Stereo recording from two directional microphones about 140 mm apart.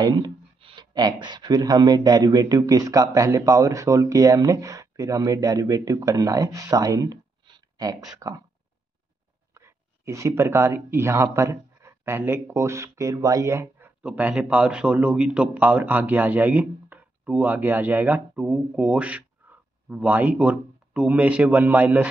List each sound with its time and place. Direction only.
0.0 s speech: 35° right (ahead or behind)
9.5 s speech: 20° right (ahead or behind)